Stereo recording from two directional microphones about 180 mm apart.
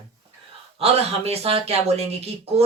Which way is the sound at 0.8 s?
35° right (ahead or behind).